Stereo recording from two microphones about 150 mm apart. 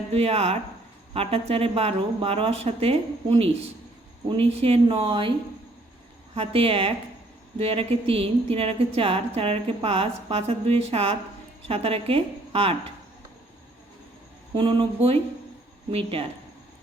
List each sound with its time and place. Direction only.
0.1 s speech: 40° right (ahead or behind)
6.3 s speech: 40° right (ahead or behind)
14.5 s speech: 35° right (ahead or behind)